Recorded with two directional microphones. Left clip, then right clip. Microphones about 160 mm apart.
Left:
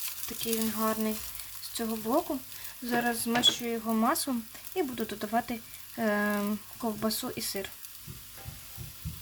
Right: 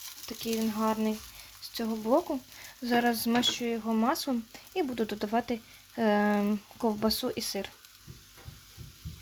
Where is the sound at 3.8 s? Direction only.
5° right (ahead or behind).